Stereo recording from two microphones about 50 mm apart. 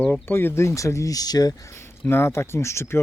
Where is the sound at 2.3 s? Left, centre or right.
Left.